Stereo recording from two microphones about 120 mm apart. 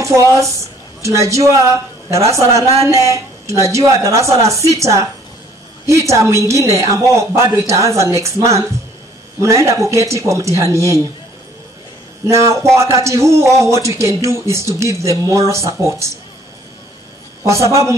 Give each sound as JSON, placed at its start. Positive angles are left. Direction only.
{"t": 0.0, "sound": "a woman's voice", "side_deg": -25}
{"t": 12.3, "sound": "a woman's voice", "side_deg": -25}
{"t": 17.5, "sound": "a woman's voice", "side_deg": -25}